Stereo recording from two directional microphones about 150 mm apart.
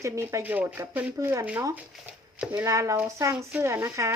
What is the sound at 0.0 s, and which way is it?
Speech, 20° right (ahead or behind).